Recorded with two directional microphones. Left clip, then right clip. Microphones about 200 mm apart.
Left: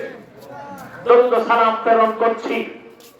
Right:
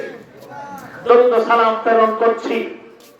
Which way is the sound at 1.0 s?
20° right (ahead or behind).